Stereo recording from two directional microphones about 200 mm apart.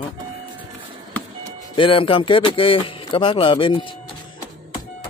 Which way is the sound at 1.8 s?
25° left (ahead or behind).